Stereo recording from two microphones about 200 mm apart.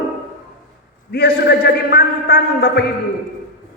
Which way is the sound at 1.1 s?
50° left (ahead or behind).